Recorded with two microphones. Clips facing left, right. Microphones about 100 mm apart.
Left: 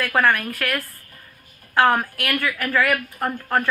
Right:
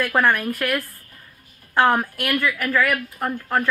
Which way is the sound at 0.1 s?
5° right (ahead or behind).